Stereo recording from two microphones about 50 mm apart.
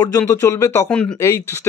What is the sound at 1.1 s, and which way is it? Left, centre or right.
Speech, left.